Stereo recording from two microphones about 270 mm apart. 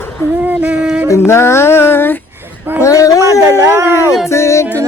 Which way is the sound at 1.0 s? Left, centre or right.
Centre.